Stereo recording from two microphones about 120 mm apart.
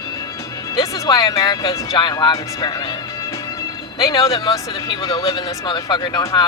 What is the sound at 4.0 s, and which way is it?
Speech, 45° left (ahead or behind).